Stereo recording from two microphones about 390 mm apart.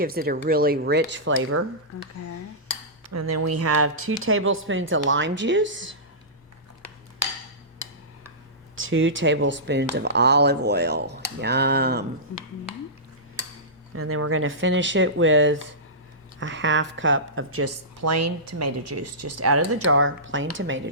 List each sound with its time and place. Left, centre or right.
0.0 s speech: right
3.1 s speech: right
8.7 s speech: right
13.9 s speech: right